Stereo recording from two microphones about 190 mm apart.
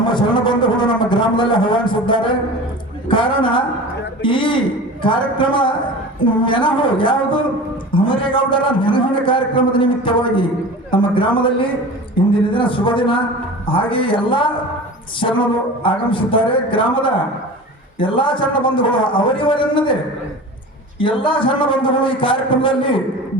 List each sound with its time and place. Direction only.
0.0 s a man's voice: 25° left (ahead or behind)
21.0 s a man's voice: 25° left (ahead or behind)